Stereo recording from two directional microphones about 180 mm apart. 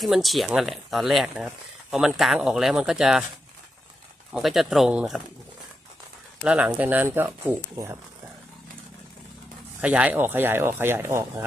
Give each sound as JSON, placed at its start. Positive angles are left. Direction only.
{"t": 0.0, "sound": "speech", "side_deg": 0}
{"t": 4.3, "sound": "speech", "side_deg": 0}
{"t": 6.4, "sound": "speech", "side_deg": -5}
{"t": 9.8, "sound": "speech", "side_deg": -10}